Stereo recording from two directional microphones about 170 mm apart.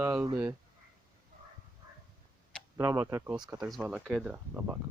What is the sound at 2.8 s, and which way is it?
Speech, 15° right (ahead or behind).